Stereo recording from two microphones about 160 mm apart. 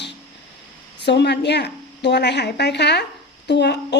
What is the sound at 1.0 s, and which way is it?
A woman's voice, 90° left.